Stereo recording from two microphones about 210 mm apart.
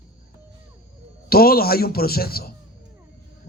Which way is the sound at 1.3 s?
45° left (ahead or behind).